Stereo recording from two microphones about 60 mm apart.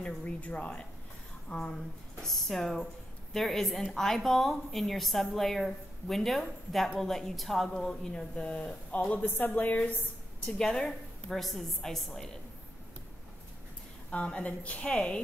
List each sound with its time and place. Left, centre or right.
0.0 s a woman's voice: left
9.1 s a woman's voice: left
10.4 s a woman's voice: centre
14.1 s a woman's voice: centre